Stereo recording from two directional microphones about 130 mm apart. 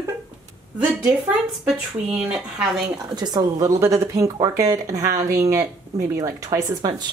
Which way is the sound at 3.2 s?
30° right (ahead or behind).